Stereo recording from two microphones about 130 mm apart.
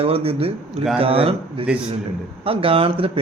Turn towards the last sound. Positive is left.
turn(degrees=-45)  # may be behind; listen again after turning